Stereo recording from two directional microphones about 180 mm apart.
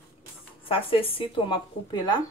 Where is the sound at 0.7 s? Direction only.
30° left (ahead or behind).